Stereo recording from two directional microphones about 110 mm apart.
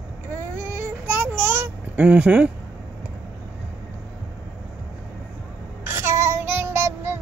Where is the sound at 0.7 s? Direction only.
15° right (ahead or behind).